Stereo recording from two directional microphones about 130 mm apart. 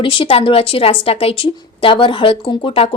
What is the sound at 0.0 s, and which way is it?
A woman's voice, 45° left (ahead or behind).